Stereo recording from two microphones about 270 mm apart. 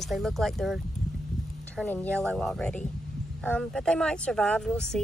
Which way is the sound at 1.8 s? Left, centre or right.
Centre.